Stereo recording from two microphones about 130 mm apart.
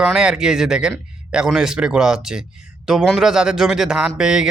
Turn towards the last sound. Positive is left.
turn(degrees=-5)  # may be behind; listen again after turning